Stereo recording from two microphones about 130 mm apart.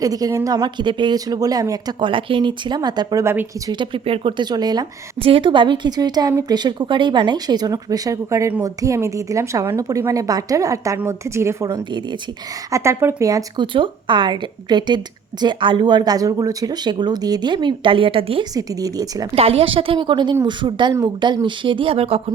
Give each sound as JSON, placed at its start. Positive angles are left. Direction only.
{"t": 0.0, "sound": "a woman's voice", "side_deg": -30}
{"t": 12.7, "sound": "a woman's voice", "side_deg": -20}
{"t": 13.6, "sound": "a woman's voice", "side_deg": -40}
{"t": 18.5, "sound": "a woman's voice", "side_deg": -25}
{"t": 19.4, "sound": "a woman's voice", "side_deg": -45}